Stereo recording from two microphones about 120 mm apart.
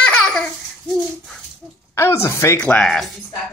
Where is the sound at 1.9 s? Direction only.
20° left (ahead or behind).